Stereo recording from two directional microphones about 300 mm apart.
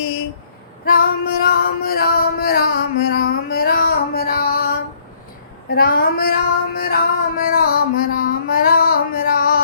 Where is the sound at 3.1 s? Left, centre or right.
Left.